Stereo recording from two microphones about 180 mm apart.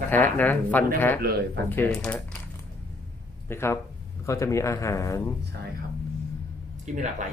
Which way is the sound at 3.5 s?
15° left (ahead or behind).